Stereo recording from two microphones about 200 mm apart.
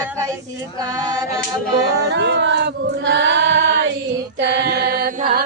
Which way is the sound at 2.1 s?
60° right (ahead or behind).